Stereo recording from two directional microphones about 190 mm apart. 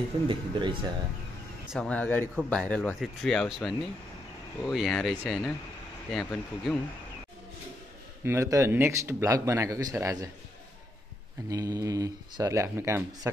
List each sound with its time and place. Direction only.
0.3 s speech: 25° right (ahead or behind)
1.7 s speech: 5° left (ahead or behind)
8.2 s speech: 15° right (ahead or behind)
11.4 s speech: 20° right (ahead or behind)